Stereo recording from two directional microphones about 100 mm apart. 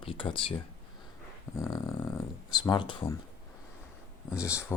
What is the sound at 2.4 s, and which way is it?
Speech, 45° left (ahead or behind).